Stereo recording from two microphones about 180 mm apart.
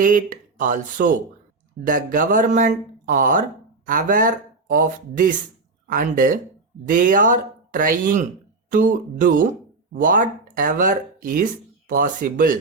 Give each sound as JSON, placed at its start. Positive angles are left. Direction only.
{"t": 0.0, "sound": "speech", "side_deg": -50}